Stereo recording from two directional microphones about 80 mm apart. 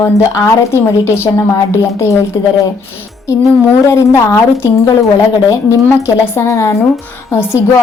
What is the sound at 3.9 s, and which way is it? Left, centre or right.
A woman's voice, left.